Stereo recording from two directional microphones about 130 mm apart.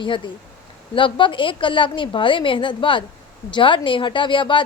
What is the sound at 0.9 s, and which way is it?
A woman's voice, 40° left (ahead or behind).